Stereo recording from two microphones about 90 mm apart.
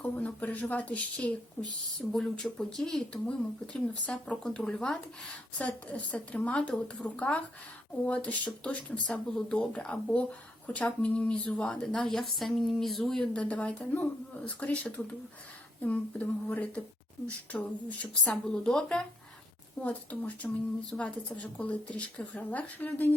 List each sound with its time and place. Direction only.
0.0 s speech: 20° left (ahead or behind)